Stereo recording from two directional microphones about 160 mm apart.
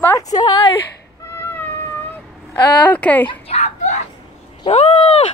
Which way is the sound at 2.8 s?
10° left (ahead or behind).